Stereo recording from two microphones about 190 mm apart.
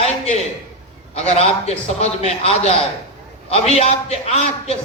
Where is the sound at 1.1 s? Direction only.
35° left (ahead or behind).